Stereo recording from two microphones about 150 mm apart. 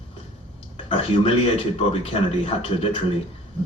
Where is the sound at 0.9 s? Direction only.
35° left (ahead or behind).